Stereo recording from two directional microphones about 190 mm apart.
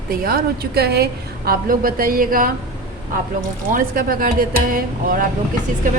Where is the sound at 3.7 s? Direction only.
50° right (ahead or behind).